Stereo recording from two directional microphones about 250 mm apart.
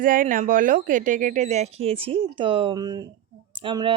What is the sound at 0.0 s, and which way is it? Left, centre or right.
Speech, right.